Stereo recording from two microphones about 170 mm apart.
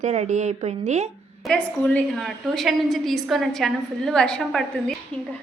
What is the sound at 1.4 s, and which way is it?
A woman's voice, 5° left (ahead or behind).